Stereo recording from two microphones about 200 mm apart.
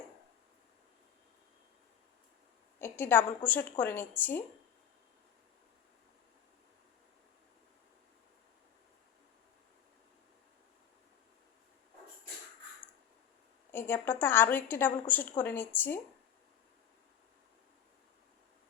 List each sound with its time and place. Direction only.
2.7 s a woman's voice: 10° left (ahead or behind)
13.7 s a woman's voice: 10° left (ahead or behind)